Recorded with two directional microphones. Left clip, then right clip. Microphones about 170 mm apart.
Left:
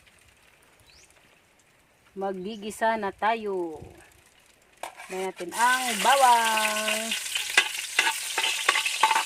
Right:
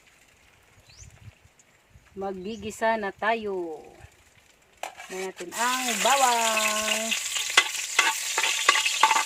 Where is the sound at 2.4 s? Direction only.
40° left (ahead or behind); by 3.6 s 20° left (ahead or behind).